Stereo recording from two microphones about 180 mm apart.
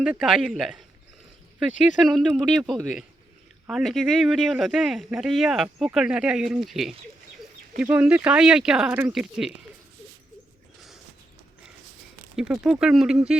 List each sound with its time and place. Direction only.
0.0 s speech: 5° right (ahead or behind)
2.0 s speech: centre (ahead or behind)
12.4 s speech: 5° right (ahead or behind)